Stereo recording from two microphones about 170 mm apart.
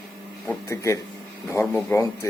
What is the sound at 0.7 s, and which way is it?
Speech, 20° left (ahead or behind).